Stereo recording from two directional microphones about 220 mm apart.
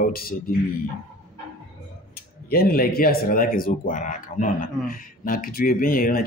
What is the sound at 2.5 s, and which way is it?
Speech, 45° left (ahead or behind).